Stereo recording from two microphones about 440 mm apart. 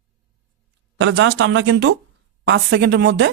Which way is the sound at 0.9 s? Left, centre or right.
Right.